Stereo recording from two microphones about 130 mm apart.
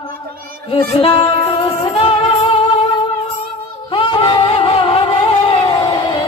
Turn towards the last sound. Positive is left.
turn(degrees=35)  # may be behind; listen again after turning